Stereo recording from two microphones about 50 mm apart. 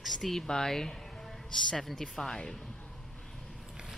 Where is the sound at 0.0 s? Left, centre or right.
Centre.